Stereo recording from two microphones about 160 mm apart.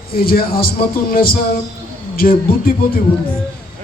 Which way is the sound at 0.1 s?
65° left (ahead or behind).